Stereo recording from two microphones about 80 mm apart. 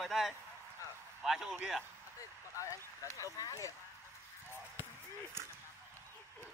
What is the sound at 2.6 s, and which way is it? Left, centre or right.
Speech, left.